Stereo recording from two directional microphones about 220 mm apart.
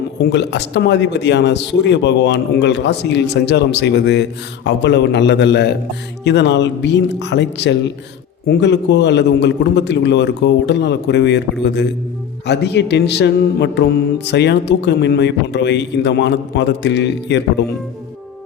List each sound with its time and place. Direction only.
0.3 s speech: 50° left (ahead or behind)